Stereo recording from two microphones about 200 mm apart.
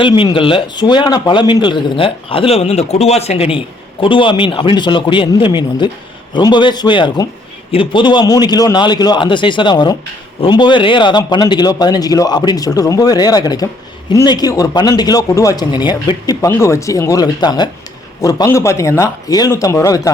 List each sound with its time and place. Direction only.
0.0 s a man's voice: 20° left (ahead or behind)